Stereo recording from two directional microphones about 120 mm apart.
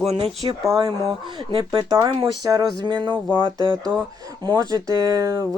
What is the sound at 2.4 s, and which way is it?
Speech, 30° right (ahead or behind).